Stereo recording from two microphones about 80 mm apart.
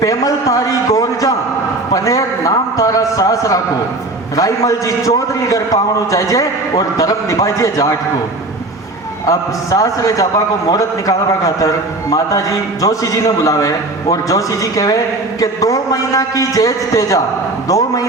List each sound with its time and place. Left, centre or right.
0.0 s a man's voice: left
1.9 s a sound: left
4.4 s a man's voice: left
9.2 s a man's voice: left